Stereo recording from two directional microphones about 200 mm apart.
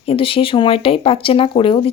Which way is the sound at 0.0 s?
30° left (ahead or behind).